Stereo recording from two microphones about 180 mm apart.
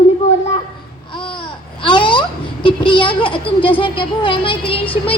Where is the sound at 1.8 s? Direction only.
25° left (ahead or behind).